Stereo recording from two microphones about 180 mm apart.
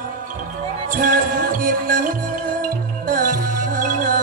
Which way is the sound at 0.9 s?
50° right (ahead or behind).